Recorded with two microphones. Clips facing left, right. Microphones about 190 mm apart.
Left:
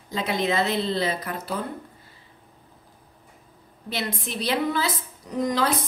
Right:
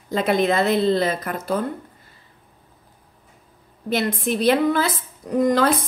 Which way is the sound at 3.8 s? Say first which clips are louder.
Right 9 dB; 50° right (ahead or behind).